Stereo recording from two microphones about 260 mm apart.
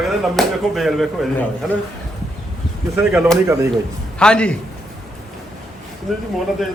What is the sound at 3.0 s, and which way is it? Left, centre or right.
Speech, centre.